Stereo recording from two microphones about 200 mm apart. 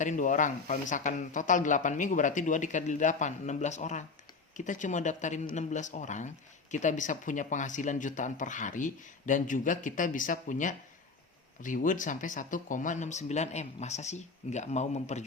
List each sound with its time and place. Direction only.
0.0 s speech: 40° left (ahead or behind)